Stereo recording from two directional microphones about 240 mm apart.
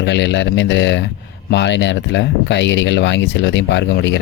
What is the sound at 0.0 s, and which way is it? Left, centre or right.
Speech, left.